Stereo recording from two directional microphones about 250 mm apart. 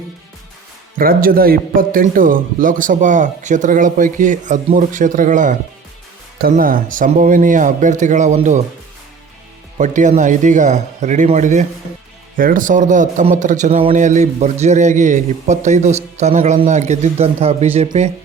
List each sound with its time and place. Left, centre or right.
0.9 s a man's voice: right
9.7 s a man's voice: right